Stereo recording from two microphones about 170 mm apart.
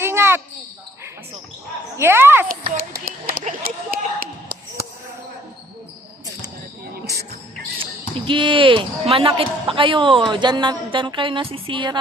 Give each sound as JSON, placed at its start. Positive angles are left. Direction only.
{"t": 0.0, "sound": "basketball bounce", "side_deg": -15}
{"t": 2.0, "sound": "speech", "side_deg": -15}
{"t": 2.5, "sound": "speech", "side_deg": -60}
{"t": 3.0, "sound": "a sound", "side_deg": -60}
{"t": 8.3, "sound": "speech", "side_deg": -30}